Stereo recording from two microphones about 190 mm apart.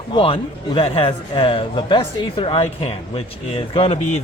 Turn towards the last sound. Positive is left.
turn(degrees=30)  # may be behind; listen again after turning